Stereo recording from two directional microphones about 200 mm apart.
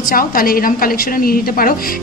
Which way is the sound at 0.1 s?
45° left (ahead or behind).